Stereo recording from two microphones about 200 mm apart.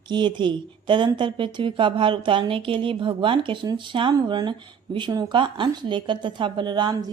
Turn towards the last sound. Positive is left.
turn(degrees=-20)  # may be behind; listen again after turning